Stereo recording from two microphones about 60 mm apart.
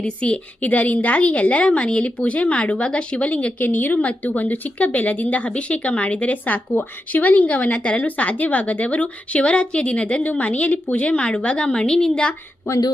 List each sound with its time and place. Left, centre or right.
0.0 s speech: left
12.7 s speech: left